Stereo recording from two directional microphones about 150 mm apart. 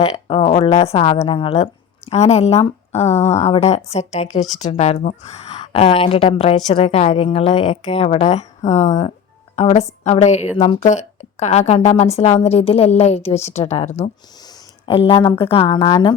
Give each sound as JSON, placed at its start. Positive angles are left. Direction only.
{"t": 0.0, "sound": "a woman's voice", "side_deg": 35}
{"t": 14.4, "sound": "speech", "side_deg": 35}